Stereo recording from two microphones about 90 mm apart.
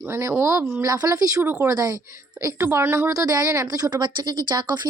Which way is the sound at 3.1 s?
40° right (ahead or behind).